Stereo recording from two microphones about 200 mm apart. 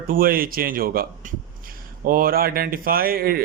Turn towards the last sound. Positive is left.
turn(degrees=-50)  # may be behind; listen again after turning